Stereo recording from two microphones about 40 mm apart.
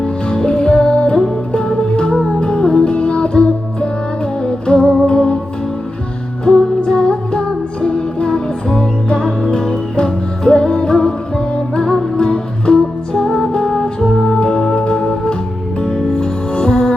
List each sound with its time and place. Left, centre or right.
0.0 s music: left
6.4 s music: left
14.8 s organ: left
15.8 s music: centre